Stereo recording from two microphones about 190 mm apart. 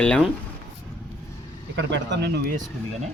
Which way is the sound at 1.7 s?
70° right (ahead or behind).